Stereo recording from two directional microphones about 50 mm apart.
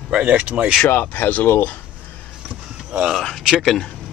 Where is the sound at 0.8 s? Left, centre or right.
Left.